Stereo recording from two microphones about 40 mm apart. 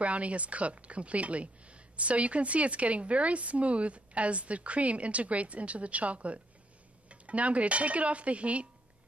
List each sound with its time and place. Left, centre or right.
0.0 s speech: right